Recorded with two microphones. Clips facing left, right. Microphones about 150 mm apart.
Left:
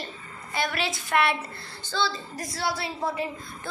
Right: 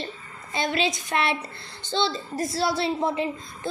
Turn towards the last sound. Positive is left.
turn(degrees=-25)  # may be behind; listen again after turning